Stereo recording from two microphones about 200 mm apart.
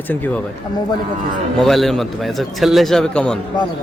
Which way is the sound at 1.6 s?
Centre (ahead or behind).